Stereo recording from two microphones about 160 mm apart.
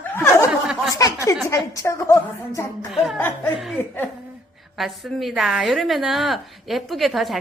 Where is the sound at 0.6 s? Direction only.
5° right (ahead or behind).